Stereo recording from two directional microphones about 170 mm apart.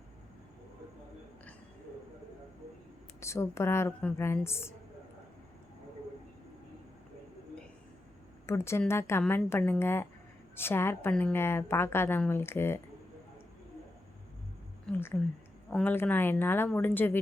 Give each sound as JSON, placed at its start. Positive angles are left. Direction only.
{"t": 3.2, "sound": "a woman's voice", "side_deg": 15}
{"t": 8.4, "sound": "a woman's voice", "side_deg": 15}
{"t": 14.9, "sound": "a woman's voice", "side_deg": 15}